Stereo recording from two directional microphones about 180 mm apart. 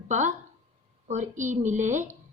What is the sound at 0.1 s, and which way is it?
A woman's voice, 45° right (ahead or behind).